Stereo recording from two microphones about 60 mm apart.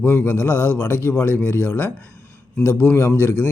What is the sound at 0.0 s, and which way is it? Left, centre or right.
Speech, left.